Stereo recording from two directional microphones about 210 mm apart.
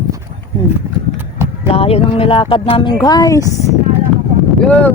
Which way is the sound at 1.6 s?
25° left (ahead or behind).